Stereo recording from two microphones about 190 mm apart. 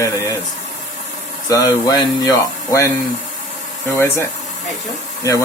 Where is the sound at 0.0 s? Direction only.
15° left (ahead or behind).